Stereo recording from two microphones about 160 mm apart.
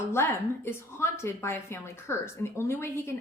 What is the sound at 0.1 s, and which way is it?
Speech, 15° left (ahead or behind).